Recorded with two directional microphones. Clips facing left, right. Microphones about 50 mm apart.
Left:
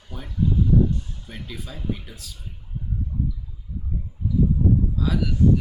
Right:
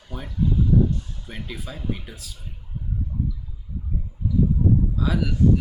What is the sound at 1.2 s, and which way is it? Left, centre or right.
Speech, centre.